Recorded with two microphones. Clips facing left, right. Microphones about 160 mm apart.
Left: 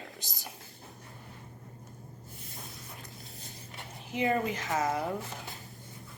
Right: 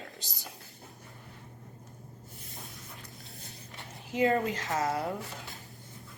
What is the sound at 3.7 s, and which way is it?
Speech, 20° left (ahead or behind).